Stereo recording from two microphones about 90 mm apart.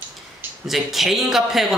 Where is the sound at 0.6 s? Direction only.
Centre (ahead or behind).